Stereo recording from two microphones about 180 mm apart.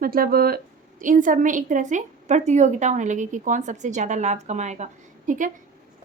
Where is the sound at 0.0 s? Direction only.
55° right (ahead or behind).